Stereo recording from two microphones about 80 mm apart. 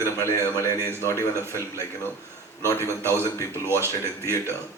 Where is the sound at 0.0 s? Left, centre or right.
Left.